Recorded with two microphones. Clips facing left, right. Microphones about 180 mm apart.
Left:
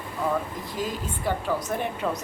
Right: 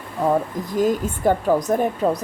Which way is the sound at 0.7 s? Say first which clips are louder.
Right 11 dB; 50° right (ahead or behind).